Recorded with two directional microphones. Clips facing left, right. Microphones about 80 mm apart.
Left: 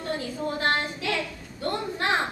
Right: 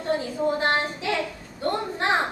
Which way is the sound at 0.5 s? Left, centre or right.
Right.